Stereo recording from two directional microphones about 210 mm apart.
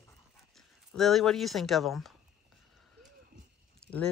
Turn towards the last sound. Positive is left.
turn(degrees=5)  # may be behind; listen again after turning